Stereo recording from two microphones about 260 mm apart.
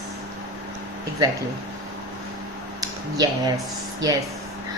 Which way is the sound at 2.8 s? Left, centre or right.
Centre.